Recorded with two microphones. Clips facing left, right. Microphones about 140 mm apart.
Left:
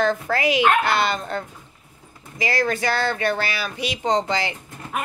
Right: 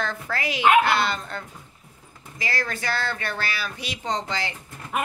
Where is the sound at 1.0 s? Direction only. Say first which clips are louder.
Left 3 dB; 20° left (ahead or behind).